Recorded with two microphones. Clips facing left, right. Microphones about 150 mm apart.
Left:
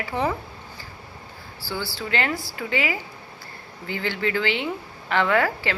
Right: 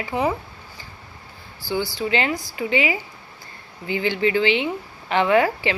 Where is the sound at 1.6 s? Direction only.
20° right (ahead or behind).